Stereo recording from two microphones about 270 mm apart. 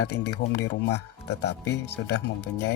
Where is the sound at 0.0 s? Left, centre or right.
Left.